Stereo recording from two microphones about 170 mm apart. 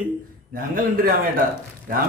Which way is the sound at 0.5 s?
55° right (ahead or behind).